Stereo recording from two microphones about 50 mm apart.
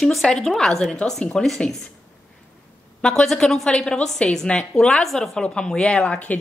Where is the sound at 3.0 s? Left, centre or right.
Centre.